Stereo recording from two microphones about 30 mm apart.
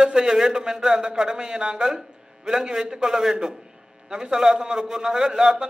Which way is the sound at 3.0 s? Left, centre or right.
Centre.